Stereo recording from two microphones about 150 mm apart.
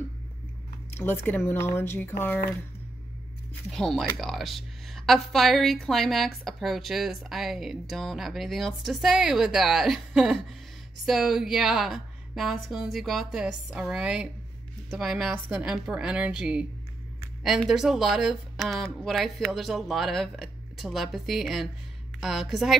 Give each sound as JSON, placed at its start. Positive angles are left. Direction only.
{"t": 0.9, "sound": "speech", "side_deg": 15}
{"t": 3.7, "sound": "a woman's voice", "side_deg": 5}